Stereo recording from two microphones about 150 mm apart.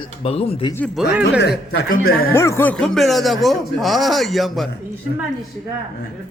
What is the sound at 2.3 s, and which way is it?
Speech, 15° left (ahead or behind).